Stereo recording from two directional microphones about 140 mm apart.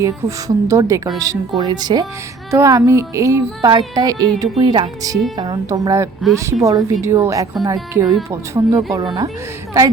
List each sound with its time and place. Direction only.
0.0 s speech: 25° right (ahead or behind)